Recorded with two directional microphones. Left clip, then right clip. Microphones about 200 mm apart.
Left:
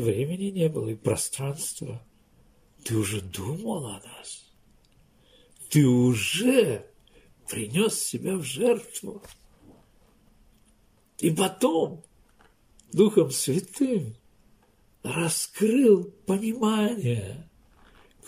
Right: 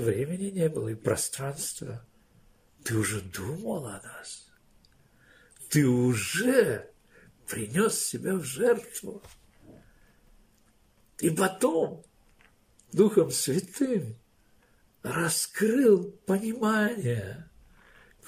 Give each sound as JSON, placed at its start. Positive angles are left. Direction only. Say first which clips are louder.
{"t": 0.0, "sound": "speech", "louder": "left 2 dB", "side_deg": 0}
{"t": 5.9, "sound": "speech", "louder": "left 3 dB", "side_deg": 0}
{"t": 11.1, "sound": "speech", "louder": "left 1 dB", "side_deg": 0}
{"t": 13.1, "sound": "speech", "louder": "left 2 dB", "side_deg": 0}